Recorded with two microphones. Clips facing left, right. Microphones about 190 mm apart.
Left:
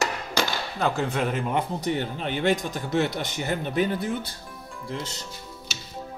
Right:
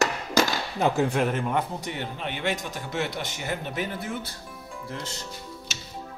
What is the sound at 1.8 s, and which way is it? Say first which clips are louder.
Speech: left 5 dB; 35° left (ahead or behind).